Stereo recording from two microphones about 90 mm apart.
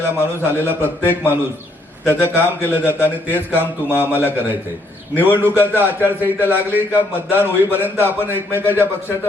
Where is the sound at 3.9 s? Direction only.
25° left (ahead or behind).